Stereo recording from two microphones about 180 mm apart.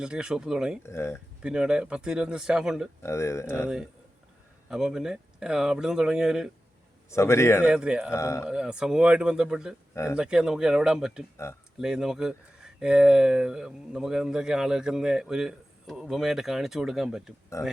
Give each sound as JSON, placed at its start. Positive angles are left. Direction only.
{"t": 0.0, "sound": "speech", "side_deg": -5}
{"t": 0.8, "sound": "speech", "side_deg": 15}
{"t": 1.4, "sound": "speech", "side_deg": -5}
{"t": 3.0, "sound": "speech", "side_deg": 15}
{"t": 4.7, "sound": "speech", "side_deg": -5}
{"t": 7.1, "sound": "speech", "side_deg": 15}
{"t": 7.6, "sound": "speech", "side_deg": -5}
{"t": 8.1, "sound": "speech", "side_deg": 15}
{"t": 8.4, "sound": "speech", "side_deg": -5}
{"t": 9.9, "sound": "speech", "side_deg": 15}
{"t": 10.2, "sound": "speech", "side_deg": -5}